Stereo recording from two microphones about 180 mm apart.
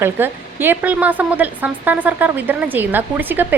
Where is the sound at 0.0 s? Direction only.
10° right (ahead or behind).